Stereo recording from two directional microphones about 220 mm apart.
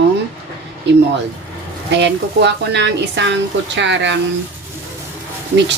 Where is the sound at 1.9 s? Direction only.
50° right (ahead or behind).